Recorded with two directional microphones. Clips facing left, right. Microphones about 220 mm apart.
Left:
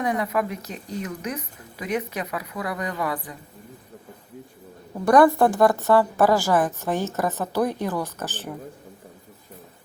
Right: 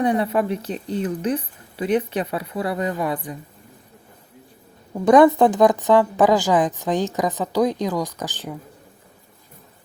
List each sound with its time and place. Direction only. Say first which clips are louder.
0.0 s speech: right 5 dB; 30° right (ahead or behind)
5.0 s speech: right 3 dB; 20° right (ahead or behind)